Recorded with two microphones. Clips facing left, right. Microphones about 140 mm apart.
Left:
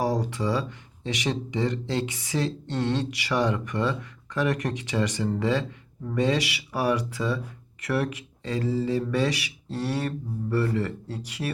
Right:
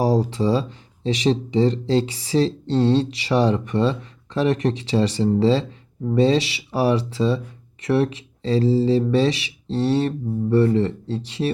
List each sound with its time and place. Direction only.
0.0 s speech: 30° right (ahead or behind)